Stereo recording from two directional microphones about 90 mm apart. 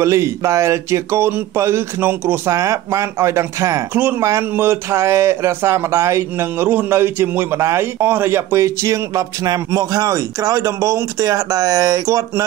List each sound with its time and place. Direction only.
0.0 s speech: 35° right (ahead or behind)
2.5 s speech: 35° right (ahead or behind)